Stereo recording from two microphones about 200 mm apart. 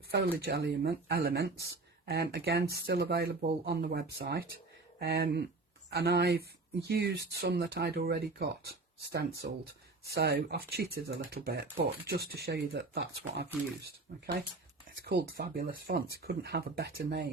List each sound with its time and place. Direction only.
0.1 s speech: 55° right (ahead or behind)